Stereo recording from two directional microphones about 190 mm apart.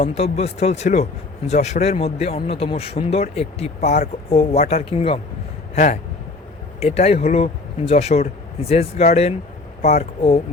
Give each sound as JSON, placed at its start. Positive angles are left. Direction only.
{"t": 0.0, "sound": "speech", "side_deg": 35}
{"t": 5.7, "sound": "speech", "side_deg": 40}